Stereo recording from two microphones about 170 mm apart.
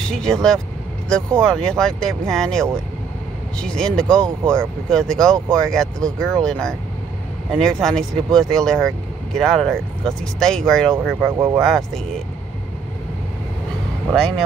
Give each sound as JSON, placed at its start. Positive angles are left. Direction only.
{"t": 0.1, "sound": "speech", "side_deg": 5}
{"t": 11.3, "sound": "speech", "side_deg": -15}